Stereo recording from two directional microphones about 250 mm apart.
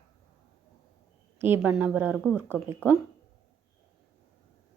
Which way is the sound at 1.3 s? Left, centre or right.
Centre.